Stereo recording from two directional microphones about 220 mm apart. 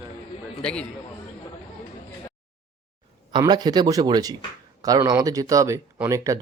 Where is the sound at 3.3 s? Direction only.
20° right (ahead or behind).